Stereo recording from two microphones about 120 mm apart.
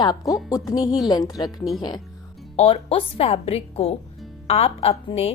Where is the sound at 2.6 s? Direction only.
55° left (ahead or behind).